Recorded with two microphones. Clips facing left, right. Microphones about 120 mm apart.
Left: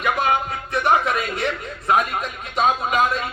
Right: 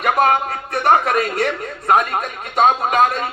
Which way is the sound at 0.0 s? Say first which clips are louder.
Right 5 dB; 50° right (ahead or behind).